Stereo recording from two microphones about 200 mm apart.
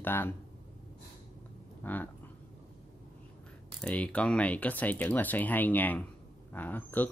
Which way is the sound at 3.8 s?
5° left (ahead or behind).